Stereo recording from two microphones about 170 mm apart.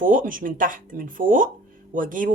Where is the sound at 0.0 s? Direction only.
50° right (ahead or behind).